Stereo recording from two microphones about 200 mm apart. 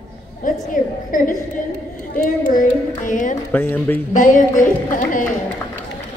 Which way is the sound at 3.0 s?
40° left (ahead or behind).